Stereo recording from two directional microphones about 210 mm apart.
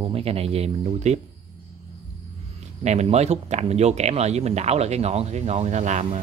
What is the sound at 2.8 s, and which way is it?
Speech, 30° right (ahead or behind).